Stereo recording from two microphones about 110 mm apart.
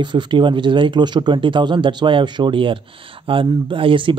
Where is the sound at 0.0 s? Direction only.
45° right (ahead or behind).